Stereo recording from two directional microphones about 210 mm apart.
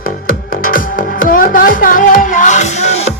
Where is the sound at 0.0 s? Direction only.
40° left (ahead or behind).